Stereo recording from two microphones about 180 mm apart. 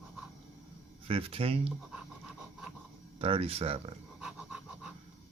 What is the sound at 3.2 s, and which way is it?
Speech, 30° right (ahead or behind).